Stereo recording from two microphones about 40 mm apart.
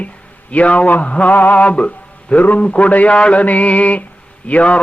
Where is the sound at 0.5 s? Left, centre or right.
Left.